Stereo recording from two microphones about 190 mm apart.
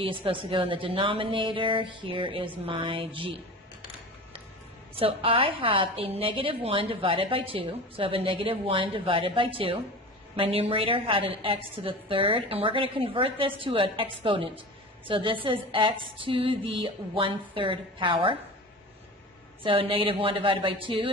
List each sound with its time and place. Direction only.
0.0 s a woman's voice: 25° right (ahead or behind)
4.9 s a woman's voice: 30° right (ahead or behind)
19.6 s a woman's voice: 30° right (ahead or behind)